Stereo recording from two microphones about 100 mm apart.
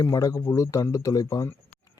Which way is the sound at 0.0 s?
35° left (ahead or behind).